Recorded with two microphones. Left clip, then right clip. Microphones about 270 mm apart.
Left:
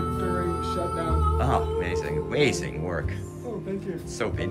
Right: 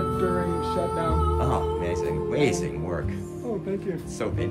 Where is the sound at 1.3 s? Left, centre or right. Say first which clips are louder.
Even; centre.